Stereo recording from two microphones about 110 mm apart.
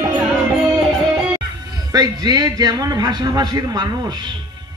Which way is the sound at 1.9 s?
35° right (ahead or behind).